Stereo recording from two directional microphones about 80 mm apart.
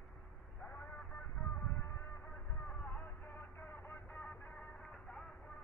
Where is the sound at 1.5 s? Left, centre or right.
Left; by 4.6 s centre.